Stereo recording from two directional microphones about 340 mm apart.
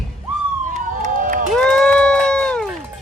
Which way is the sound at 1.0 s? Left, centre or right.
Right.